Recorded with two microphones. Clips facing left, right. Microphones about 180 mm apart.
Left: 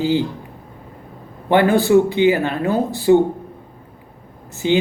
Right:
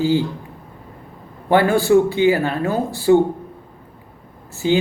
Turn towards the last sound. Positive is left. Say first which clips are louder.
# even
turn(degrees=20)  # may be behind; listen again after turning